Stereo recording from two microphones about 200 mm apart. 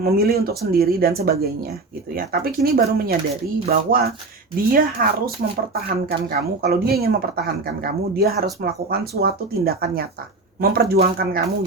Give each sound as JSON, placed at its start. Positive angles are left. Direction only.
{"t": 0.0, "sound": "speech", "side_deg": -50}